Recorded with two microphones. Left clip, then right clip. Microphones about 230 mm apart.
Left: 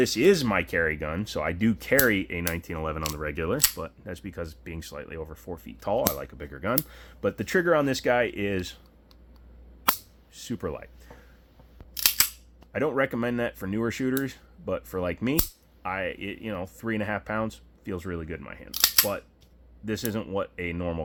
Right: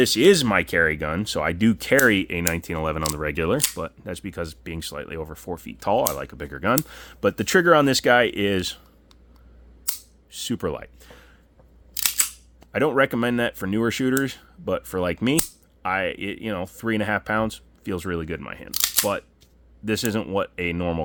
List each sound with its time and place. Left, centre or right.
0.0 s speech: right
10.3 s speech: right
11.9 s speech: right
18.7 s camera: right
19.8 s speech: right